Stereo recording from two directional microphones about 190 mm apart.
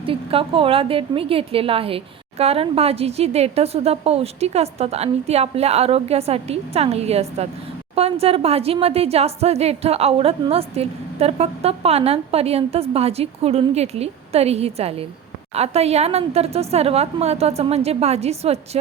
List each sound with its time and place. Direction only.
0.0 s a woman's voice: 30° right (ahead or behind)